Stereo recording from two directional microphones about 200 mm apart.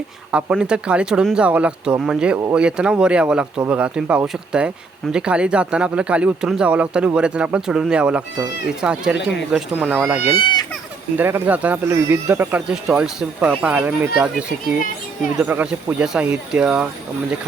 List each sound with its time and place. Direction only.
0.3 s speech: 5° right (ahead or behind)
10.3 s speech: 20° left (ahead or behind)
11.2 s speech: 10° right (ahead or behind)
15.4 s speech: 5° right (ahead or behind)